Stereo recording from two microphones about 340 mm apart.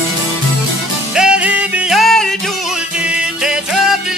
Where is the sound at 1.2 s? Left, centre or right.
Centre.